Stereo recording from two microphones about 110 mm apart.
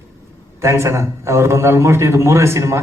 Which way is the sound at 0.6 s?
25° right (ahead or behind).